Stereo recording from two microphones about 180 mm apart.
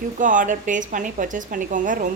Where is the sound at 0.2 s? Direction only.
45° right (ahead or behind).